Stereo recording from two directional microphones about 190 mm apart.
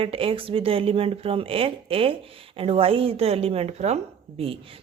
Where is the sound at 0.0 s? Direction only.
30° right (ahead or behind).